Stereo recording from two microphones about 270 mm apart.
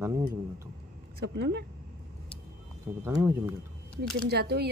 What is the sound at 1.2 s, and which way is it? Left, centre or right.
Speech, right.